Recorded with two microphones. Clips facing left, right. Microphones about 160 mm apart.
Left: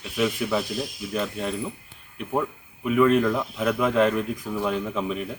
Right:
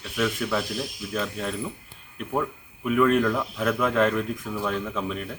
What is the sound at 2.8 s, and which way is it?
Speech, 5° left (ahead or behind).